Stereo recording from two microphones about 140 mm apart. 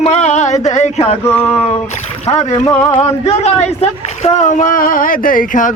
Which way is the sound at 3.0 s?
50° left (ahead or behind).